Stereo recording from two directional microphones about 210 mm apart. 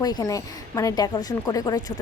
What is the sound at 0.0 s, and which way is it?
Speech, 20° left (ahead or behind).